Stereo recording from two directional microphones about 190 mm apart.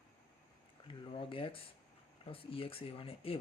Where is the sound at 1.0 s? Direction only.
25° left (ahead or behind).